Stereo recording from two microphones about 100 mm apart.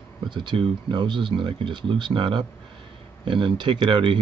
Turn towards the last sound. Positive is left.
turn(degrees=-50)  # may be behind; listen again after turning